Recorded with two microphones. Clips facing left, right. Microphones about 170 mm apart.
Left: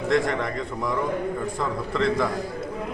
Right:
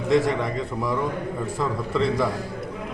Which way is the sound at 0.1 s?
Centre (ahead or behind).